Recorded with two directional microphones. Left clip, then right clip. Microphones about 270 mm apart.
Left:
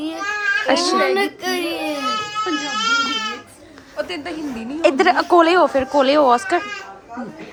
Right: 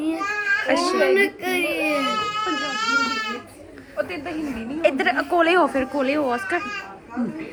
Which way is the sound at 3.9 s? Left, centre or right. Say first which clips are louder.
Left 1 dB; left.